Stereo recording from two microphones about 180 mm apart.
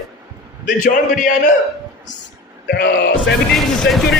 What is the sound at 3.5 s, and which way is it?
Speech, centre (ahead or behind).